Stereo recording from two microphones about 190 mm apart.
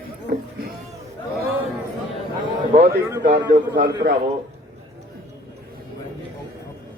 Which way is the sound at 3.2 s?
65° right (ahead or behind).